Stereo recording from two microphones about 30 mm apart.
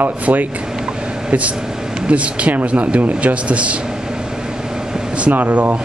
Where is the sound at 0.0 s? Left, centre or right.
Right.